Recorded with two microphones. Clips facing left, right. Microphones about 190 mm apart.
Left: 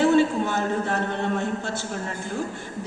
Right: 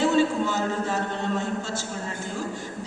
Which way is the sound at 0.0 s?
55° left (ahead or behind).